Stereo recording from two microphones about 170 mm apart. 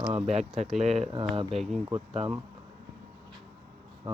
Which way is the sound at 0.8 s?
35° right (ahead or behind).